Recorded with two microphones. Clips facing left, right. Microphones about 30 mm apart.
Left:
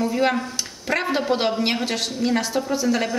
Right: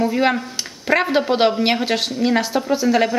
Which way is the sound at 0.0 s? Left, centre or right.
Centre.